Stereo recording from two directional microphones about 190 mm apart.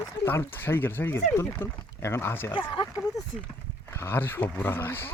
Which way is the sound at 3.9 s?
15° left (ahead or behind).